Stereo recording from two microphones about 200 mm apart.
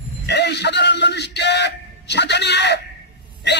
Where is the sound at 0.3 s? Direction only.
60° left (ahead or behind).